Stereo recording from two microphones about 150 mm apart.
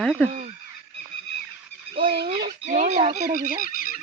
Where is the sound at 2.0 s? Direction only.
80° right.